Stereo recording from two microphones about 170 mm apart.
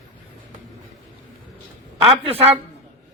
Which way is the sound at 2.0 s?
35° right (ahead or behind).